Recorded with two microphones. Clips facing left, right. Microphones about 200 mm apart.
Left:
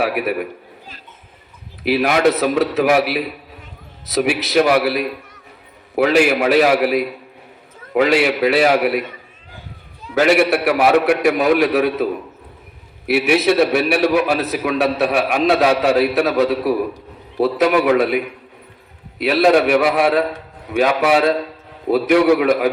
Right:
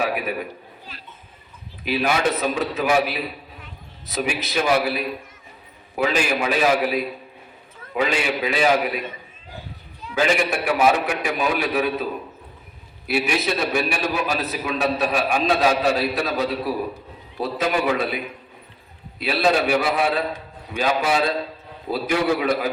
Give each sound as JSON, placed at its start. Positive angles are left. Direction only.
{"t": 0.0, "sound": "a man's voice", "side_deg": 75}
{"t": 1.8, "sound": "a man's voice", "side_deg": 75}
{"t": 10.2, "sound": "a man's voice", "side_deg": 70}
{"t": 13.1, "sound": "a man's voice", "side_deg": 70}
{"t": 19.2, "sound": "a man's voice", "side_deg": 70}